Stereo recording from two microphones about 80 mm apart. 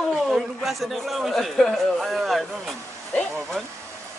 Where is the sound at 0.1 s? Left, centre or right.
Centre.